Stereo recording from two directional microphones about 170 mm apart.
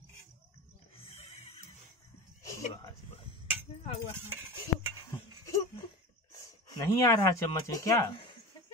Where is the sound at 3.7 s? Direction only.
35° left (ahead or behind).